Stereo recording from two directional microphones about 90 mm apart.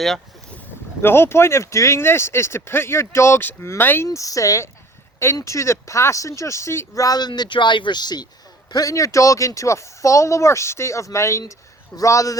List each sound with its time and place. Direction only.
1.0 s speech: 25° left (ahead or behind); by 8.3 s 50° left (ahead or behind)
8.7 s speech: 40° left (ahead or behind)